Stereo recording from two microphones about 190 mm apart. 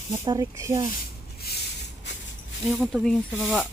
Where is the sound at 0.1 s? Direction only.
15° right (ahead or behind).